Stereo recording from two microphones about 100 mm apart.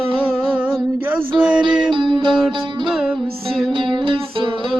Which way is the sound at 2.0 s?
50° right (ahead or behind).